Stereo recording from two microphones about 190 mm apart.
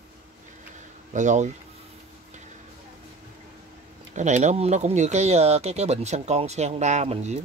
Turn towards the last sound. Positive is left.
turn(degrees=-35)  # may be behind; listen again after turning